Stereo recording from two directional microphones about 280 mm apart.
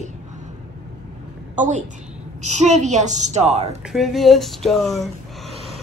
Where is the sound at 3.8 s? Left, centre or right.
Centre.